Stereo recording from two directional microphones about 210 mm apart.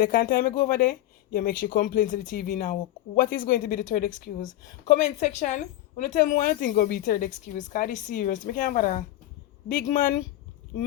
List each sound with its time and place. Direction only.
0.0 s a woman's voice: 40° left (ahead or behind)